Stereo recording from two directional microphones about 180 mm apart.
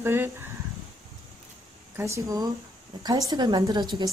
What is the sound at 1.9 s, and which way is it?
A woman's voice, 15° right (ahead or behind).